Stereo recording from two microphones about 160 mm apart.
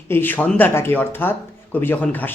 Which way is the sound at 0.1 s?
10° left (ahead or behind).